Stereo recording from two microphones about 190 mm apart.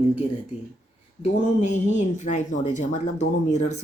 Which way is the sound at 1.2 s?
40° left (ahead or behind).